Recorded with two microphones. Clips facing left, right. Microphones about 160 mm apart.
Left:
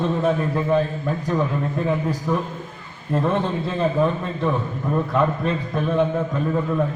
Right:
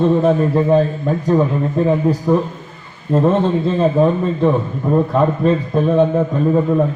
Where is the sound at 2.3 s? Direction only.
35° right (ahead or behind).